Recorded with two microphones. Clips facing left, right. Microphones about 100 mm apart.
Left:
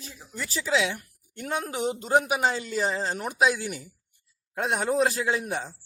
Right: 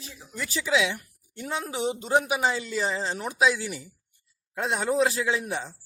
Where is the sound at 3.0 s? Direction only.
5° left (ahead or behind).